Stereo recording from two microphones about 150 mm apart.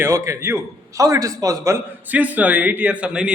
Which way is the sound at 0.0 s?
20° right (ahead or behind).